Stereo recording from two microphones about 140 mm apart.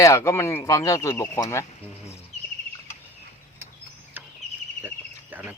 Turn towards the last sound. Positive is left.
turn(degrees=-10)  # may be behind; listen again after turning